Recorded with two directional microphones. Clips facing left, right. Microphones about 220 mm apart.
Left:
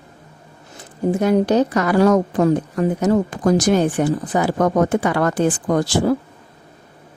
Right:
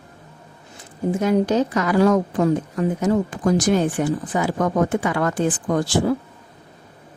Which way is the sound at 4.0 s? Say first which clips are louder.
Left 3 dB; 35° left (ahead or behind).